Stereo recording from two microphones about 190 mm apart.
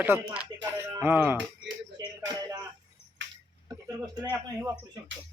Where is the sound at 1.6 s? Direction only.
20° right (ahead or behind).